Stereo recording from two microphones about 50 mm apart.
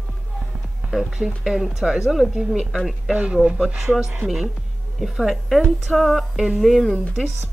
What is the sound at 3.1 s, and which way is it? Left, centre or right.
Speech, right.